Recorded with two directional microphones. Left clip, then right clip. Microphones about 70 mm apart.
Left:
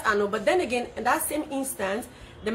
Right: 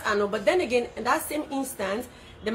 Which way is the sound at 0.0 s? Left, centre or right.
Left.